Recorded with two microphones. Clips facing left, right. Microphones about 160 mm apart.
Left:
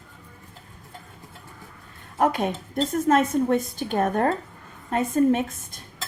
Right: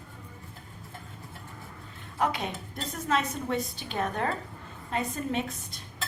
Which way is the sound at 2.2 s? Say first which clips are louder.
Left 7 dB; 50° left (ahead or behind).